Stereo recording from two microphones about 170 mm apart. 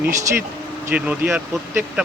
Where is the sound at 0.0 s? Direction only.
15° right (ahead or behind).